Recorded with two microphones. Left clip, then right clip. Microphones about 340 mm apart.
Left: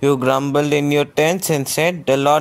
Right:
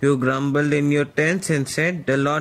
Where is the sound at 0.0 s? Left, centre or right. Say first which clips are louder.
Left 4 dB; left.